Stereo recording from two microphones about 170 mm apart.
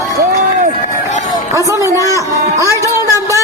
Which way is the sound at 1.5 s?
15° right (ahead or behind).